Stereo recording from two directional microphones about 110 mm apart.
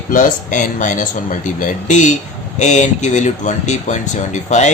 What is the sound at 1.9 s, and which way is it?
Speech, 90° left.